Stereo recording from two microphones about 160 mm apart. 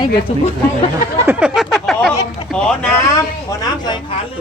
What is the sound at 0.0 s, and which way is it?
Speech, 35° left (ahead or behind).